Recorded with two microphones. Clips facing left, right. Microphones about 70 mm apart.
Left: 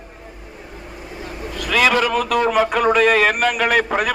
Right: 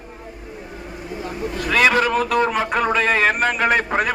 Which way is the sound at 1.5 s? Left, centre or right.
Right.